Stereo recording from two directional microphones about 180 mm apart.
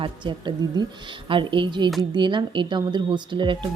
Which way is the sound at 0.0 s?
25° right (ahead or behind).